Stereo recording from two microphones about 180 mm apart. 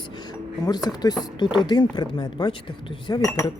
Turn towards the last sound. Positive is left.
turn(degrees=25)  # may be behind; listen again after turning